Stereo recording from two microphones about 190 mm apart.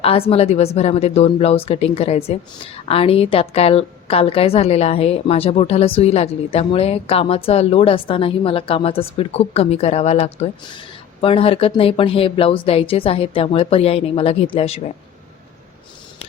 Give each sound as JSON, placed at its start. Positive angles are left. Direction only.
{"t": 0.0, "sound": "a woman's voice", "side_deg": 30}